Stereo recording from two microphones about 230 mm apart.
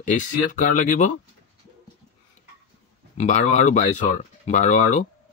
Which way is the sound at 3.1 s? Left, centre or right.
Left.